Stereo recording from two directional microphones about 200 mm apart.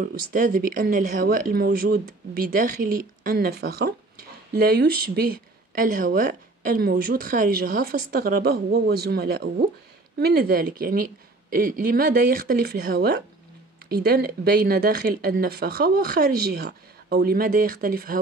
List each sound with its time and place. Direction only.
0.0 s speech: 45° right (ahead or behind)